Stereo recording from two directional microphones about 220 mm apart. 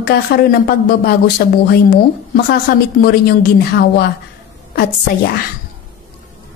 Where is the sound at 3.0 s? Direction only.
45° left (ahead or behind).